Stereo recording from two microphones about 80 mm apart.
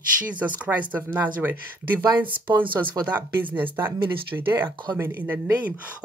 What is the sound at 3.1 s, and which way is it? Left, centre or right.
Speech, right.